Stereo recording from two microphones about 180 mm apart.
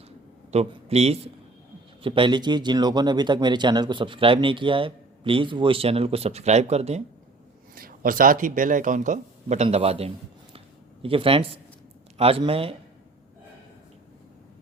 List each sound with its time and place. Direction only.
0.5 s a man's voice: 35° right (ahead or behind)
7.8 s a man's voice: 50° right (ahead or behind); by 12.7 s 30° right (ahead or behind)